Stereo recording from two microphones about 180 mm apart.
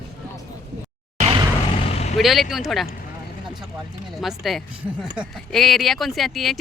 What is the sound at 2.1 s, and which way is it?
Speech, centre (ahead or behind).